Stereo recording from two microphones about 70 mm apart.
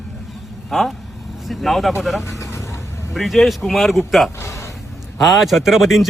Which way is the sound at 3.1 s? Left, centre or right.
Centre.